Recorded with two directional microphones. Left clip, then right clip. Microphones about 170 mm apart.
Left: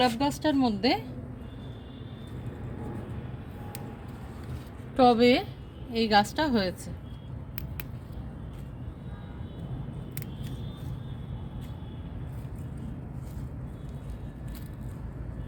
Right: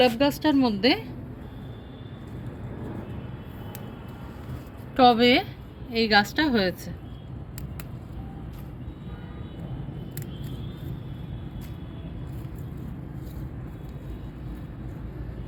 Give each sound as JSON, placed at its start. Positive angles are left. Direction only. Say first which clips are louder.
{"t": 0.0, "sound": "a woman's voice", "louder": "right 5 dB", "side_deg": 0}
{"t": 4.9, "sound": "a woman's voice", "louder": "right 3 dB", "side_deg": 5}